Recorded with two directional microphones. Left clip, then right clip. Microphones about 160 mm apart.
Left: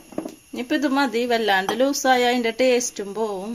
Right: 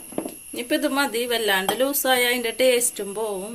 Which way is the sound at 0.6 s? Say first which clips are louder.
Left 1 dB; 50° left (ahead or behind).